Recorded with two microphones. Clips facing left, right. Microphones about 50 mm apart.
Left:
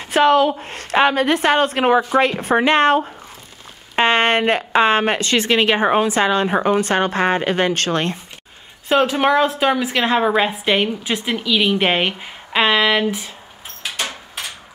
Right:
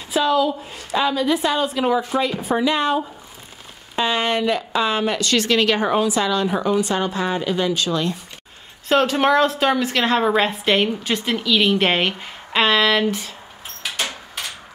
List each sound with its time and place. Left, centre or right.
0.0 s a woman's voice: left
5.2 s a woman's voice: left
8.8 s a woman's voice: centre
14.0 s door: centre